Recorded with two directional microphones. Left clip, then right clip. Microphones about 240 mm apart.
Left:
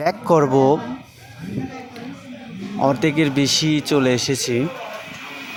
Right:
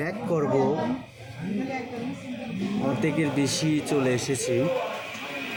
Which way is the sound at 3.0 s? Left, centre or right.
Left.